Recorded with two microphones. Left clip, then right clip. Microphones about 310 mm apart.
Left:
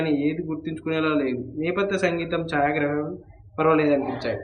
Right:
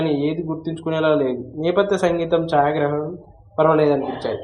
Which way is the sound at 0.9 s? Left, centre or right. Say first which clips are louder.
Right 5 dB; centre.